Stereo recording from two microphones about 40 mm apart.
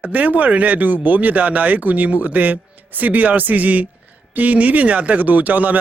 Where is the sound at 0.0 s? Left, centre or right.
Right.